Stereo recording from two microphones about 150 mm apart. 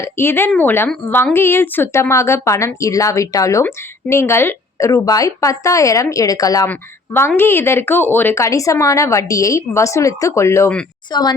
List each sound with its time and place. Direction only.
0.0 s a woman's voice: 15° left (ahead or behind)